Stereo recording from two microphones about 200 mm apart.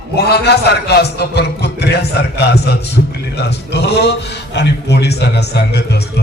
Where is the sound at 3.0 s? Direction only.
45° left (ahead or behind).